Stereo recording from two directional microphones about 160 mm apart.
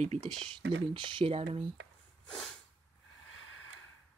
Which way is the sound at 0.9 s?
30° right (ahead or behind).